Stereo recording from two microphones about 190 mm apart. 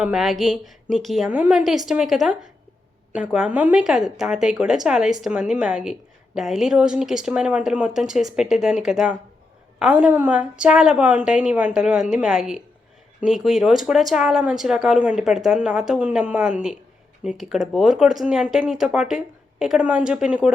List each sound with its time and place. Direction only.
0.0 s speech: centre (ahead or behind)